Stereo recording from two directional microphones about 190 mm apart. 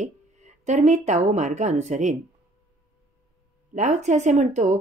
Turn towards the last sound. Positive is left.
turn(degrees=-35)  # may be behind; listen again after turning